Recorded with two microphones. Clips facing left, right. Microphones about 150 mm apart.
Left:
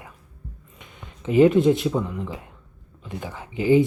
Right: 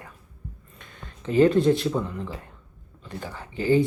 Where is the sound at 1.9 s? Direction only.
5° left (ahead or behind).